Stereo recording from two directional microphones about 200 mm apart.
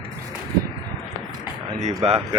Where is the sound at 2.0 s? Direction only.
30° right (ahead or behind).